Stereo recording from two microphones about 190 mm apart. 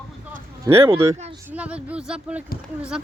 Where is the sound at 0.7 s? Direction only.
30° right (ahead or behind).